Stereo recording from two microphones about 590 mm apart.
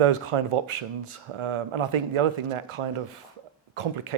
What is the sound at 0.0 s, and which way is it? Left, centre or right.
Speech, right.